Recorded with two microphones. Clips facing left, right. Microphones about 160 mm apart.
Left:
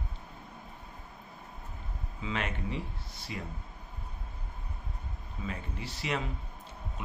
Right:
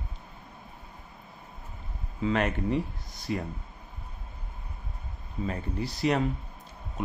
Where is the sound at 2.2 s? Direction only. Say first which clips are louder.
Right 9 dB; 50° right (ahead or behind).